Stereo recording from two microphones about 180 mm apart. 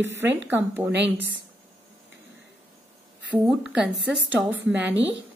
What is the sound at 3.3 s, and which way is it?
A woman's voice, 5° right (ahead or behind).